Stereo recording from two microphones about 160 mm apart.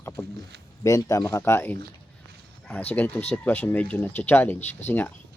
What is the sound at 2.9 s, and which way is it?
Speech, 10° left (ahead or behind).